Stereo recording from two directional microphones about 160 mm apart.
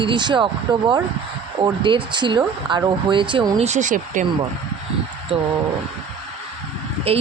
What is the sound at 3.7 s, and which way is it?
Speech, 50° right (ahead or behind).